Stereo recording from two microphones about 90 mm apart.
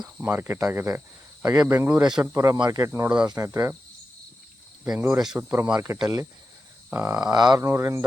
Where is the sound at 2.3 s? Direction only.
35° right (ahead or behind).